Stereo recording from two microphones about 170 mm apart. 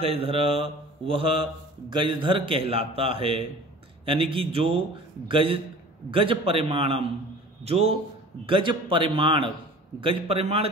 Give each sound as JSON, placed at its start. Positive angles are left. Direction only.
{"t": 0.0, "sound": "a man's voice", "side_deg": -35}